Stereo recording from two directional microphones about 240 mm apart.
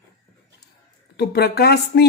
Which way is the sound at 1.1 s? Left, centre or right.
Left.